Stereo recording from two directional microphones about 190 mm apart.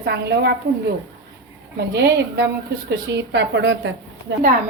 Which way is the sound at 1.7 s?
60° right (ahead or behind).